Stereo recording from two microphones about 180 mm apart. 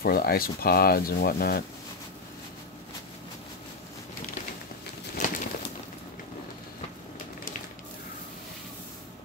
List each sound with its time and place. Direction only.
0.0 s speech: 55° left (ahead or behind)
5.1 s bird: 45° left (ahead or behind)